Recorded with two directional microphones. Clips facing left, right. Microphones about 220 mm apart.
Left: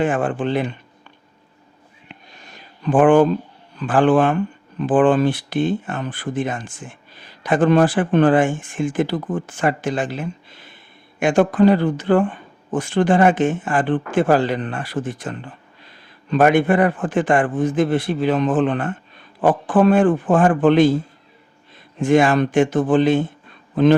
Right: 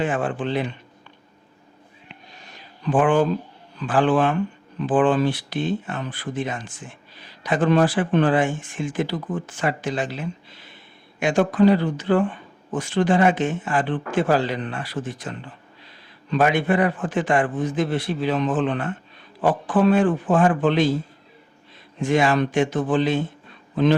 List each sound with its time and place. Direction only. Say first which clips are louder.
0.0 s speech: left 4 dB; 50° left (ahead or behind)
2.6 s a sound: left 5 dB; 50° left (ahead or behind)
3.8 s speech: left 4 dB; 50° left (ahead or behind)
21.9 s speech: left 4 dB; 50° left (ahead or behind)